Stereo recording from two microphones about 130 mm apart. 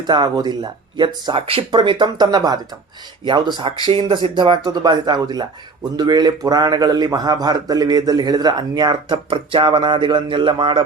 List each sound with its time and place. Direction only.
0.1 s a man's voice: 35° right (ahead or behind)